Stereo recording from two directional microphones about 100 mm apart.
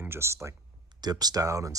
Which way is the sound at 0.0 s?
25° right (ahead or behind).